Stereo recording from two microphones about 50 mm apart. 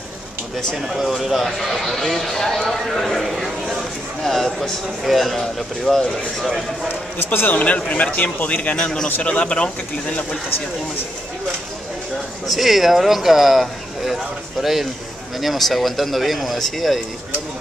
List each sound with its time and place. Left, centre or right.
0.8 s a man's voice: centre
6.9 s a man's voice: left
9.1 s a man's voice: left
12.4 s a man's voice: centre